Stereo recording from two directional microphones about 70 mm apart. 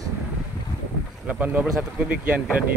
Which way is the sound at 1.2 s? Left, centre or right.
Right.